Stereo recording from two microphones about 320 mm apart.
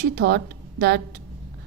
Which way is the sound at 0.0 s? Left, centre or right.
Right.